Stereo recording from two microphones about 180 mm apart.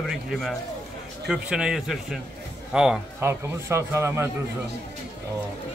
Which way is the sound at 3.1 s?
15° right (ahead or behind).